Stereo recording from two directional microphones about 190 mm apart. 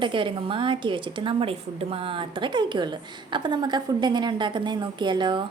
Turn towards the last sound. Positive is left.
turn(degrees=-25)  # may be behind; listen again after turning